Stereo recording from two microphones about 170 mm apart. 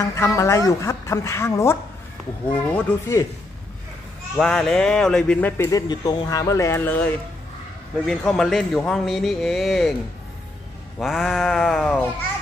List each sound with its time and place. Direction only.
0.0 s speech: 20° left (ahead or behind)
4.4 s a man's voice: 5° left (ahead or behind)
11.0 s a man's voice: centre (ahead or behind)